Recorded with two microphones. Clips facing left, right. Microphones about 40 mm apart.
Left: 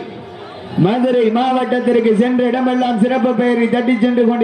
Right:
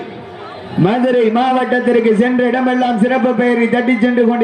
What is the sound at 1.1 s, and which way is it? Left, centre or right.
A man's voice, centre.